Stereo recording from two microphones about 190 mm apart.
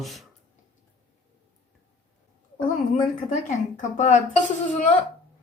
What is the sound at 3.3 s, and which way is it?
A woman's voice, 40° left (ahead or behind).